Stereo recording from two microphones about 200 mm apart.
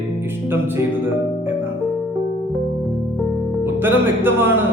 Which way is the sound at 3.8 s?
10° right (ahead or behind).